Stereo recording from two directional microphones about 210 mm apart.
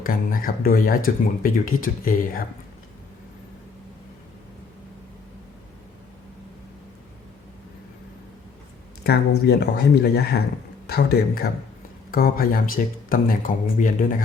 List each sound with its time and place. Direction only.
0.0 s speech: 40° left (ahead or behind)
9.5 s speech: 50° left (ahead or behind)